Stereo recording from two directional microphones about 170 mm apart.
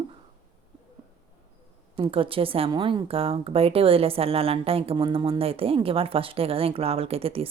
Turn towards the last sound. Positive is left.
turn(degrees=-35)  # may be behind; listen again after turning